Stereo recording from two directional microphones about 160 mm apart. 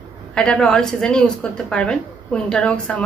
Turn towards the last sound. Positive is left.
turn(degrees=5)  # may be behind; listen again after turning